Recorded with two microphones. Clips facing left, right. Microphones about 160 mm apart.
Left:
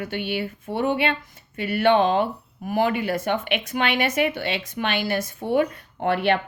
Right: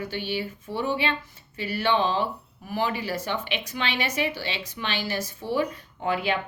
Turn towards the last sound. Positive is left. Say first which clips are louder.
# left 5 dB
turn(degrees=65)  # may be behind; listen again after turning